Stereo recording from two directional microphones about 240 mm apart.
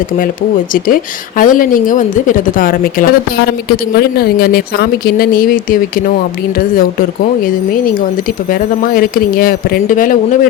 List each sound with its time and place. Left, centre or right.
0.7 s a woman's voice: left
8.4 s a woman's voice: left